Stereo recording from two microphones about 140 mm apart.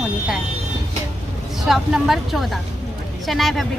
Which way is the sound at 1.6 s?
Centre (ahead or behind).